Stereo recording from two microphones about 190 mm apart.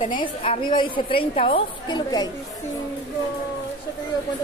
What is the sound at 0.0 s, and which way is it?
A woman's voice, 25° left (ahead or behind).